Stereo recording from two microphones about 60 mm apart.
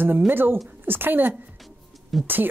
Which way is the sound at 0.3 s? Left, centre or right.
Right.